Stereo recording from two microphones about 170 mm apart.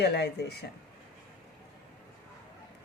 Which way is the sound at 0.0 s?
75° left (ahead or behind).